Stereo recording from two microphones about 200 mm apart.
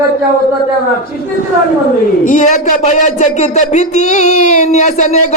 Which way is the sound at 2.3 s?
40° left (ahead or behind).